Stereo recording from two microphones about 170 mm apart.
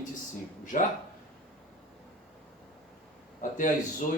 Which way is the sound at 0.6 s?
50° left (ahead or behind).